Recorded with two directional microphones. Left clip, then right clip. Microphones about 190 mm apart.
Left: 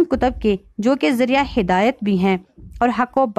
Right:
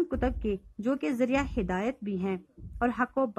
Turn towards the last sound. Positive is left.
turn(degrees=45)  # may be behind; listen again after turning